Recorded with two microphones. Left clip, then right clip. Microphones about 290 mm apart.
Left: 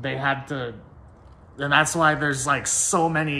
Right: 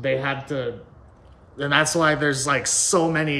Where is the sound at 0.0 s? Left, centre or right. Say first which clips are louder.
Right 1 dB; centre.